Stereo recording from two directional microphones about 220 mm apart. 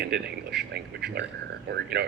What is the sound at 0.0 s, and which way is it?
Speech, 50° right (ahead or behind).